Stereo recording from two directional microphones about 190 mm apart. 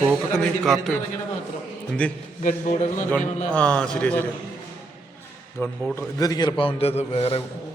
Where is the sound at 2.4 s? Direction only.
40° left (ahead or behind).